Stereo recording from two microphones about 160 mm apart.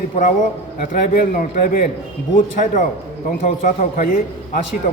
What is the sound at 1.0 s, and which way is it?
A man's voice, 60° left (ahead or behind).